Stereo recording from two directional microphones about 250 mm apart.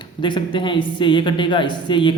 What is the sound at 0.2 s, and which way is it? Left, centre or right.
A man's voice, centre.